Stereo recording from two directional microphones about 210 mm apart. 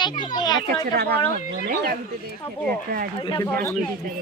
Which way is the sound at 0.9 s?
50° right (ahead or behind).